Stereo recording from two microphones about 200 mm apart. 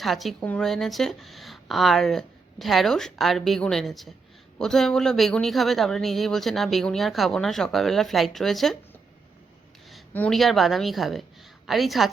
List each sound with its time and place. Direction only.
0.0 s speech: centre (ahead or behind)